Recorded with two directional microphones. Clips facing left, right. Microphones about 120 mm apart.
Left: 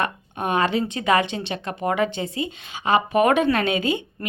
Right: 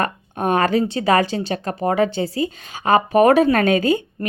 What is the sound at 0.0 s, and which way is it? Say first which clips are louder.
Speech: right 4 dB; 40° right (ahead or behind).